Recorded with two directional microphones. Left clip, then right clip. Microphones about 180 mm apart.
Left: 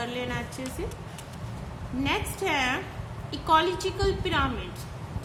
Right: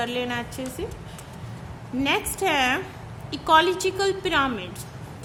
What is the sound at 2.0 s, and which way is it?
A woman's voice, 45° right (ahead or behind).